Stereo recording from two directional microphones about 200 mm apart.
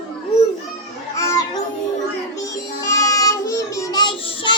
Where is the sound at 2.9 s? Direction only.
15° left (ahead or behind).